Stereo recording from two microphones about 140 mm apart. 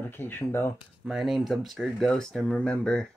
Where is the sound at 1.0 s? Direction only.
5° right (ahead or behind).